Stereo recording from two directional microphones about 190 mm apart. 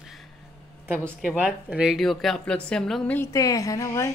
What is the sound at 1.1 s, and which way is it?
Speech, centre (ahead or behind).